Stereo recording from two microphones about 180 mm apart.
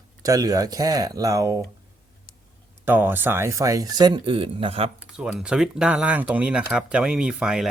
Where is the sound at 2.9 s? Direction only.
10° right (ahead or behind); by 4.9 s 30° right (ahead or behind).